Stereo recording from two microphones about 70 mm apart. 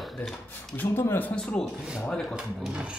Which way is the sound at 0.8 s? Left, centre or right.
Left.